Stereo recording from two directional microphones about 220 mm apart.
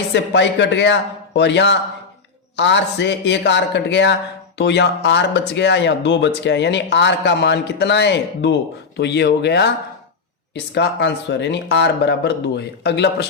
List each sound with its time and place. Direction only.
0.1 s speech: 55° left (ahead or behind)